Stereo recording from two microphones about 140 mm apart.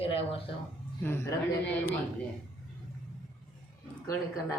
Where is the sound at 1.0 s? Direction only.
20° left (ahead or behind).